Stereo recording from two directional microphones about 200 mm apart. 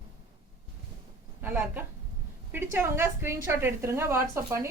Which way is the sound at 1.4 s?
10° right (ahead or behind).